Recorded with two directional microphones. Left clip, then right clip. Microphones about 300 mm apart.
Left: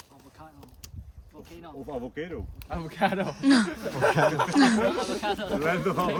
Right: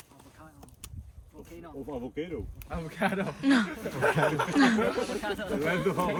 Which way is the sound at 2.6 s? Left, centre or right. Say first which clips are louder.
Left 4 dB; left.